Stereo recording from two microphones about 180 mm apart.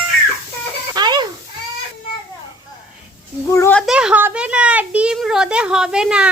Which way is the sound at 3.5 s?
15° left (ahead or behind).